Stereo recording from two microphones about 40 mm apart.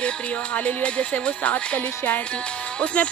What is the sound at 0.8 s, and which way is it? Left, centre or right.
Speech, left.